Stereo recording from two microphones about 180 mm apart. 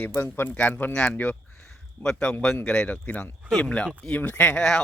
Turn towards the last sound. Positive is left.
turn(degrees=5)  # may be behind; listen again after turning